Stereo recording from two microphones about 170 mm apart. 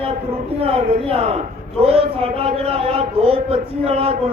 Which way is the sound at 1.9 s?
35° right (ahead or behind).